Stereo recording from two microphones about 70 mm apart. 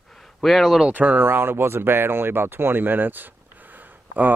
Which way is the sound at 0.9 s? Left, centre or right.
Right.